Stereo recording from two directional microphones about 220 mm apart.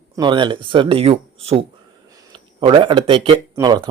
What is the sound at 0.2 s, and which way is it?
Speech, 20° right (ahead or behind).